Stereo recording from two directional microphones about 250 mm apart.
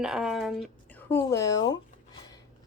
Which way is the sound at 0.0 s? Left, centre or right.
Centre.